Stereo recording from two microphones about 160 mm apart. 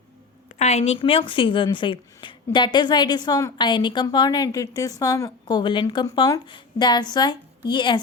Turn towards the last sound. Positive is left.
turn(degrees=30)  # may be behind; listen again after turning